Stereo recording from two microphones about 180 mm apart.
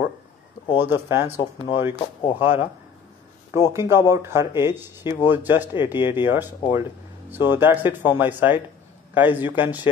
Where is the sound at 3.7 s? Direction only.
15° right (ahead or behind).